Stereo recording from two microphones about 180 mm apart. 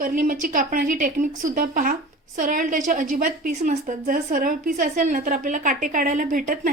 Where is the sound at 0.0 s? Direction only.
50° right (ahead or behind).